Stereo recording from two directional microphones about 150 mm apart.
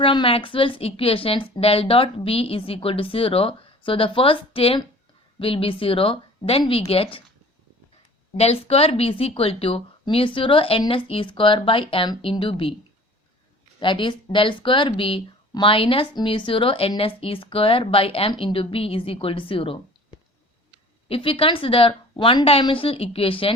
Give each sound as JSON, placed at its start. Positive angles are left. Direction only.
{"t": 0.0, "sound": "speech", "side_deg": 35}
{"t": 8.4, "sound": "speech", "side_deg": 40}
{"t": 13.7, "sound": "speech", "side_deg": 30}
{"t": 21.1, "sound": "speech", "side_deg": 35}